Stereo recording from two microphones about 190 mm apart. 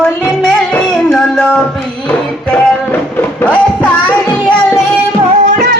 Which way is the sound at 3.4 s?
5° left (ahead or behind).